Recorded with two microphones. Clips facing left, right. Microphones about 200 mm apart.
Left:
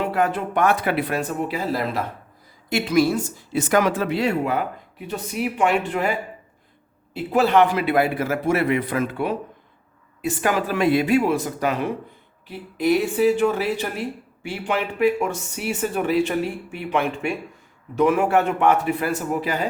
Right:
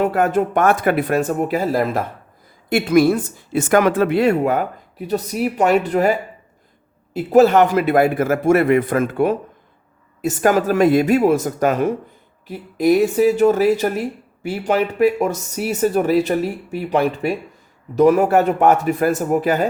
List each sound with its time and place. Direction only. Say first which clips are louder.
0.0 s a woman's voice: right 5 dB; 45° right (ahead or behind)